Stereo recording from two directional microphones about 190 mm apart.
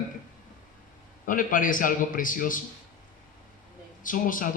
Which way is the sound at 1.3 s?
45° left (ahead or behind).